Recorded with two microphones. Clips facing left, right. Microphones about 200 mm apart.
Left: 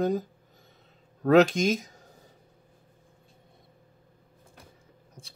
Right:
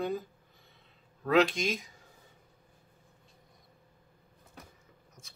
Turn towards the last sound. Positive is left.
turn(degrees=35)  # may be behind; listen again after turning